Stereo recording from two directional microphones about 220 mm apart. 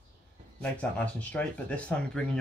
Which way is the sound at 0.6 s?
5° left (ahead or behind).